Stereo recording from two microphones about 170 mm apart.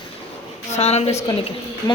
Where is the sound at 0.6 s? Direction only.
40° left (ahead or behind).